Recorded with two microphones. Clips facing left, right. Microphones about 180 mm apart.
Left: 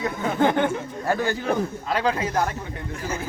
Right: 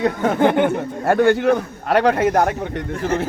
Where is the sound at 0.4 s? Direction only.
65° right (ahead or behind).